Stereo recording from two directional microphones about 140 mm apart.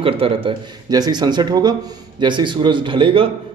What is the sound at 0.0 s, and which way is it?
A man's voice, 40° right (ahead or behind).